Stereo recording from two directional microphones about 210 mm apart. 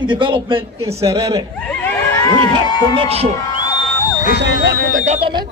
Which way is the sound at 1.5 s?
10° left (ahead or behind).